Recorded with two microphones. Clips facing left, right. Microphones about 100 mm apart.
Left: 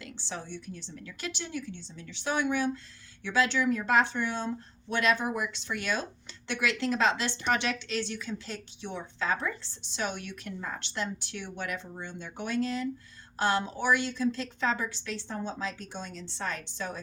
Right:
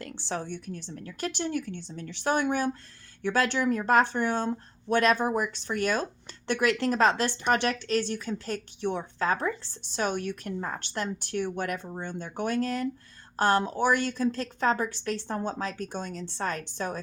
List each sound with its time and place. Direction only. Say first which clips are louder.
0.0 s a woman's voice: right 6 dB; 50° right (ahead or behind)